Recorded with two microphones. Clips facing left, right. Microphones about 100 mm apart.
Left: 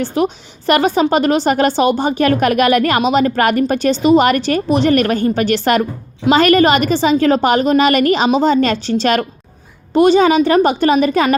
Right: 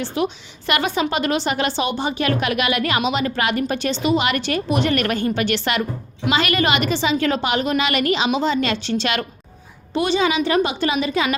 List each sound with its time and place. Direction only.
0.0 s a woman's voice: 40° left (ahead or behind)